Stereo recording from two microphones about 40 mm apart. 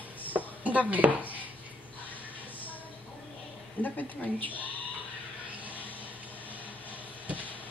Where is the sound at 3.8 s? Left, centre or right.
Left.